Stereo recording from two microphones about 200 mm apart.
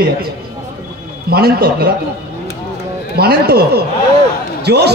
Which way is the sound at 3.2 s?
50° right (ahead or behind).